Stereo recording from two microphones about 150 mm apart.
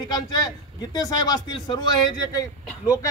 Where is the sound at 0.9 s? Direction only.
25° left (ahead or behind).